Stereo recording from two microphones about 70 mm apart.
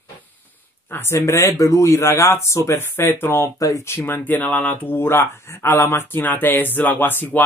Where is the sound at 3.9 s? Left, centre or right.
Left.